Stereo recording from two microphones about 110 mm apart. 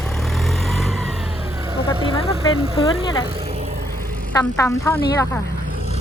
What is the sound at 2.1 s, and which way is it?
Speech, 60° left (ahead or behind).